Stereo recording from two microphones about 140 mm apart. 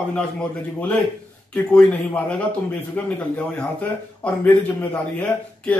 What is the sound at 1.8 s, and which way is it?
Speech, 10° left (ahead or behind).